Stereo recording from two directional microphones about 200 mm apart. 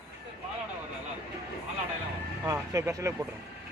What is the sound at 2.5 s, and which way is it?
Speech, 15° right (ahead or behind).